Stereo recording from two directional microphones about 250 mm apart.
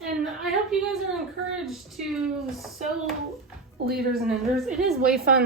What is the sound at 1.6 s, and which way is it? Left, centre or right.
Speech, centre.